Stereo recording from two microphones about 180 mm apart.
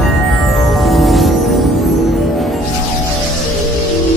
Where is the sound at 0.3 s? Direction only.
Centre (ahead or behind).